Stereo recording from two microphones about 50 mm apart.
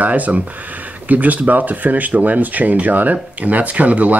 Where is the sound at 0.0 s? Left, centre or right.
Right.